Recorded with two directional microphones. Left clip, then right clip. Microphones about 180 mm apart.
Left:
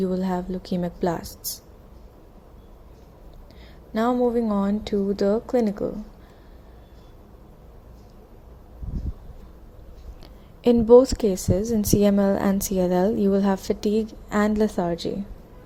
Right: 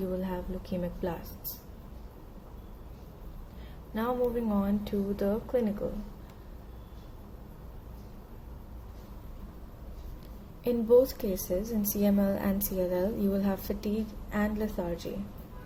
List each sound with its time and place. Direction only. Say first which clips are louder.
0.0 s a woman's voice: left 8 dB; 45° left (ahead or behind)
3.9 s a woman's voice: left 8 dB; 45° left (ahead or behind)
10.6 s a woman's voice: left 9 dB; 40° left (ahead or behind)